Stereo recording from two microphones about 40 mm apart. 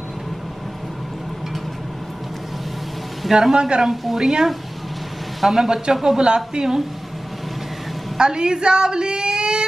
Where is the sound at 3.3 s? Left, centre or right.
Centre.